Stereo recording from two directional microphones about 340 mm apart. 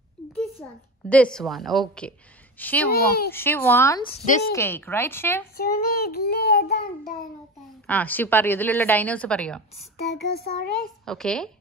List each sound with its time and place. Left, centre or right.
0.6 s speech: centre
5.6 s child singing: left
7.8 s speech: centre
9.9 s child singing: left
11.1 s speech: centre